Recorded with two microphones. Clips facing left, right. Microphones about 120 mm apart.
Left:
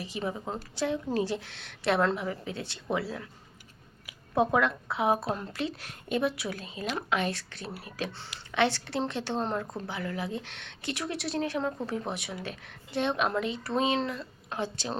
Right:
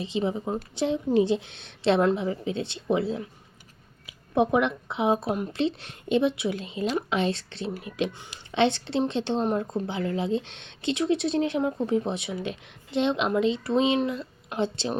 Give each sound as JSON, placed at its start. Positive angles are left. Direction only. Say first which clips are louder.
{"t": 0.0, "sound": "speech", "louder": "right 6 dB", "side_deg": -20}